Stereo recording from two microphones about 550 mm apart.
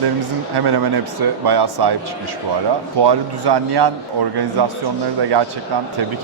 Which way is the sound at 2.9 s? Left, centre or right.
Right.